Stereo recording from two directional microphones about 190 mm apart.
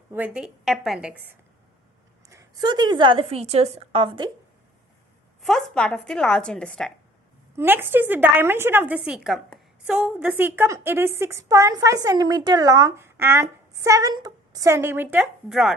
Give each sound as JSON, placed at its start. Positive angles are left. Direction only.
{"t": 0.1, "sound": "a woman's voice", "side_deg": -5}
{"t": 2.3, "sound": "a woman's voice", "side_deg": -20}
{"t": 5.4, "sound": "a woman's voice", "side_deg": 0}
{"t": 7.5, "sound": "a woman's voice", "side_deg": -10}